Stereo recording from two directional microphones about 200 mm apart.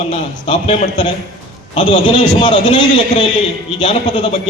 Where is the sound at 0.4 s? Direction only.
30° left (ahead or behind).